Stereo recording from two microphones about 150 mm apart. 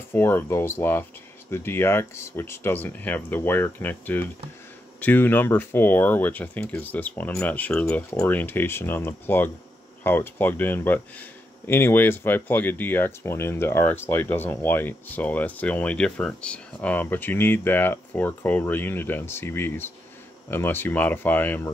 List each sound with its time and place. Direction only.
0.1 s speech: 15° left (ahead or behind)